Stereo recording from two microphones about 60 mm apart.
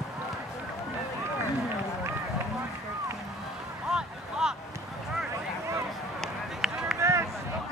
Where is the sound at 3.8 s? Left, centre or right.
Centre.